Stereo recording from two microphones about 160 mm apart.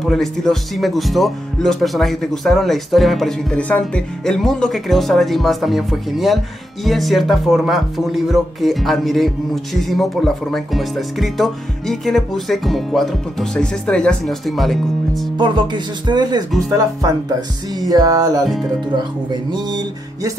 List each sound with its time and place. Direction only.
0.0 s speech: centre (ahead or behind)
15.3 s speech: 30° right (ahead or behind)
17.7 s speech: 25° right (ahead or behind)
18.4 s speech: centre (ahead or behind)